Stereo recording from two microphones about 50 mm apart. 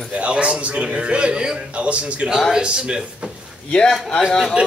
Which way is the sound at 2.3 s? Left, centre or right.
Centre.